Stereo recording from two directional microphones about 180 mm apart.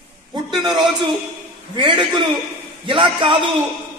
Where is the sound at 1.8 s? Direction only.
25° right (ahead or behind).